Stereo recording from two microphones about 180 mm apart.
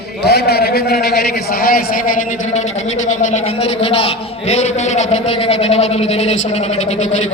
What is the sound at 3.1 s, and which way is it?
A man's voice, 40° left (ahead or behind).